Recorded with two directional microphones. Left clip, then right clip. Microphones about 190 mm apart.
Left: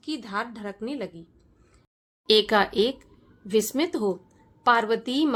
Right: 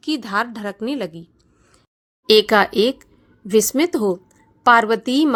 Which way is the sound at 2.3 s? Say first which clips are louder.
Right 7 dB; 30° right (ahead or behind).